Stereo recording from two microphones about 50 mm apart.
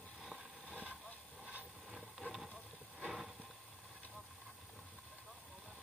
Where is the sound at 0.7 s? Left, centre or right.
Right.